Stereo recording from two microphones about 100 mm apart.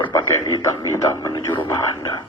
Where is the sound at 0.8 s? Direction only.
30° left (ahead or behind).